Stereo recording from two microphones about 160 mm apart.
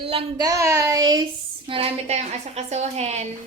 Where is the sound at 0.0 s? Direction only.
35° right (ahead or behind).